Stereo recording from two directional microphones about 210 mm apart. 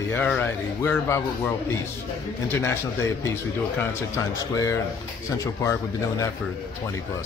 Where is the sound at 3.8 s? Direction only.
15° left (ahead or behind).